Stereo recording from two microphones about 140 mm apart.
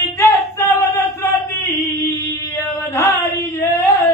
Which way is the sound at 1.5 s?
20° left (ahead or behind).